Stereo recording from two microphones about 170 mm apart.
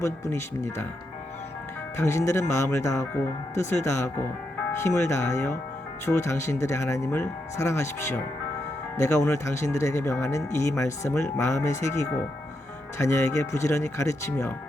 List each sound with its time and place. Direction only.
0.0 s speech: 15° left (ahead or behind)
2.0 s speech: 15° left (ahead or behind)